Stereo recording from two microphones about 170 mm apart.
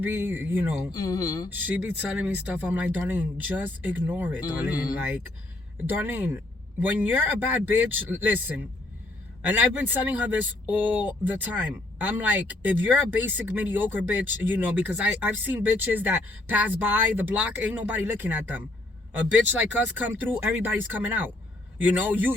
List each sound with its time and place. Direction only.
0.0 s speech: 10° right (ahead or behind)
0.9 s speech: 20° left (ahead or behind)
1.6 s speech: 10° right (ahead or behind)
5.8 s speech: 10° right (ahead or behind)